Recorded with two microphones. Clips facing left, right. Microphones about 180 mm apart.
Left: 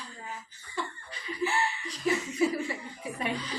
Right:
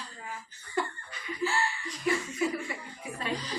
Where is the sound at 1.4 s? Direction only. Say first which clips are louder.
Left 1 dB; 20° left (ahead or behind).